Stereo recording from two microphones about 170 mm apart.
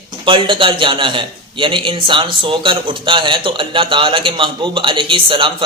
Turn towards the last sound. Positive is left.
turn(degrees=-30)  # may be behind; listen again after turning